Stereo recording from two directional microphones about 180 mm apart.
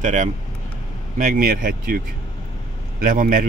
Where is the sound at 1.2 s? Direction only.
50° right (ahead or behind).